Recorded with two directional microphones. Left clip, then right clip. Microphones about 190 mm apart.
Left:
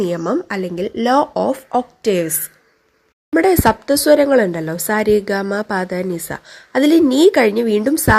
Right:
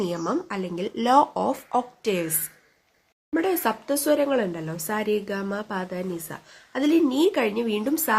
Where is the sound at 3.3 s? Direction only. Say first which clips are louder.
Left 11 dB; 35° left (ahead or behind).